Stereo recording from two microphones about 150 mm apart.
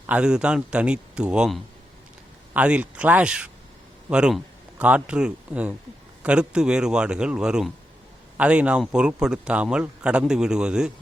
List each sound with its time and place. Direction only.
0.1 s a man's voice: 5° right (ahead or behind)